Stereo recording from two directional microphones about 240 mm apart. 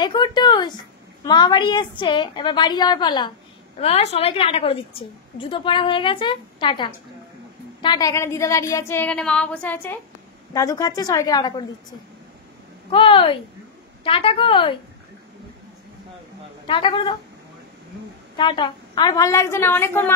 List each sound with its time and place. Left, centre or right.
0.0 s a woman's voice: centre
12.9 s a woman's voice: left
16.6 s a woman's voice: left
18.3 s speech: centre